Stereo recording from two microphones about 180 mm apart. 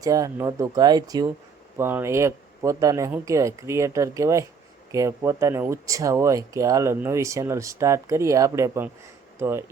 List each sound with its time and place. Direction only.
0.0 s speech: 20° right (ahead or behind)